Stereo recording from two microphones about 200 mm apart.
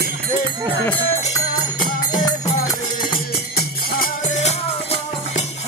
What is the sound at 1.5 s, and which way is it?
Music, 40° left (ahead or behind).